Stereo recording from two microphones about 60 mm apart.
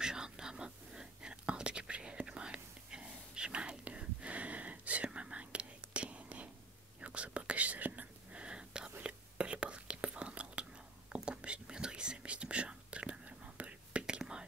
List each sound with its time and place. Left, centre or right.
0.0 s whispering: centre